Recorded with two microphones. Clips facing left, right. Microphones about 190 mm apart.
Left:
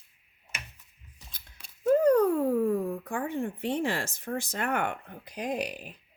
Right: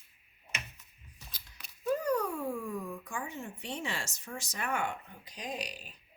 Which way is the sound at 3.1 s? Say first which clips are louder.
Left 9 dB; 60° left (ahead or behind).